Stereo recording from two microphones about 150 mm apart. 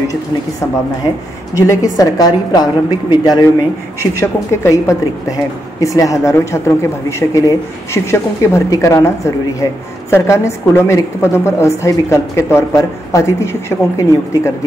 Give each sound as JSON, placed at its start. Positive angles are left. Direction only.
{"t": 1.7, "sound": "a woman's voice", "side_deg": 20}